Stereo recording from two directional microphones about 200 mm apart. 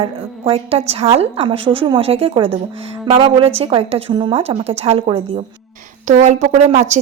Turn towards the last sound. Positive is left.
turn(degrees=-35)  # may be behind; listen again after turning